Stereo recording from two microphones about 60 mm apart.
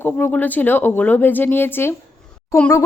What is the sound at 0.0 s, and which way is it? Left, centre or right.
Speech, left.